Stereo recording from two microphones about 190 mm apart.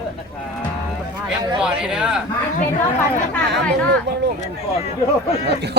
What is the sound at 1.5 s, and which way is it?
Speech, 5° right (ahead or behind).